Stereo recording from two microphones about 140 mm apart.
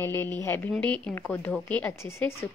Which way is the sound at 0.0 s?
15° left (ahead or behind).